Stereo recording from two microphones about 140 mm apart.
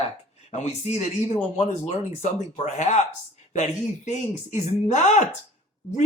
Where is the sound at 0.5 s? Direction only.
55° left (ahead or behind).